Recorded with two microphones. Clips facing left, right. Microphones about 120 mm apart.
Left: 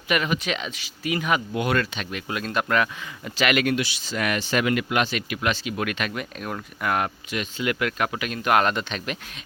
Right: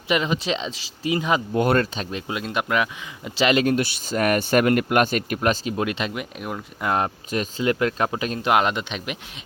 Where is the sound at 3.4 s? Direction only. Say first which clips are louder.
Right 3 dB; 30° right (ahead or behind).